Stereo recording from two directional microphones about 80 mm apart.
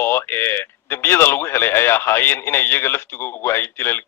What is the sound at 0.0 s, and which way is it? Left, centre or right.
Speech, left.